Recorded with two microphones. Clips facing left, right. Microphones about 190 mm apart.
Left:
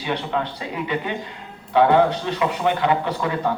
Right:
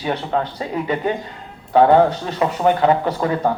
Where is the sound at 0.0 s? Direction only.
40° right (ahead or behind).